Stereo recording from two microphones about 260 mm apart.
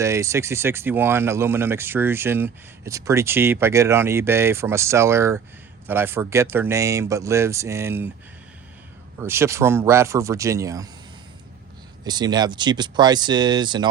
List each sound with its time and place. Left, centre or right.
0.0 s speech: centre
9.1 s speech: centre
12.0 s speech: centre